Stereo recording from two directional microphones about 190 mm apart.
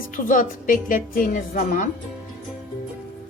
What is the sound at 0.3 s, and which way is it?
A woman's voice, 45° left (ahead or behind).